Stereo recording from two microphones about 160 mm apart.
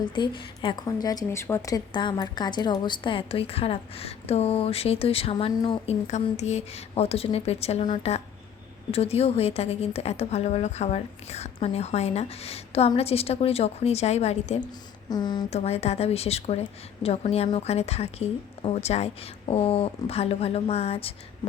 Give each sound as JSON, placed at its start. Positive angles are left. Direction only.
{"t": 0.0, "sound": "a woman's voice", "side_deg": 30}
{"t": 15.1, "sound": "speech", "side_deg": 25}
{"t": 15.4, "sound": "a woman's voice", "side_deg": 40}